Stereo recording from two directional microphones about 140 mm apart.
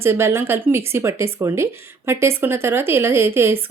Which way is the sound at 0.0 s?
20° right (ahead or behind).